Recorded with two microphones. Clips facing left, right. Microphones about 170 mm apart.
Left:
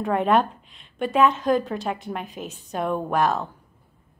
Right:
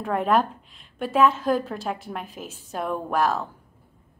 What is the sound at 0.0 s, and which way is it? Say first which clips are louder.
A woman's voice: left 2 dB; centre (ahead or behind).